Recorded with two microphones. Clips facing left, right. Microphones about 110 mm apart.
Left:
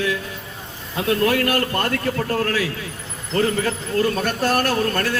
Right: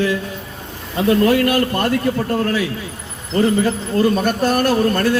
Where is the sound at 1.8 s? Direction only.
20° right (ahead or behind).